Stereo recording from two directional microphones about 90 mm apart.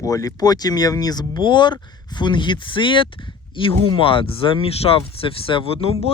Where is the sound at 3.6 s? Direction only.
80° left.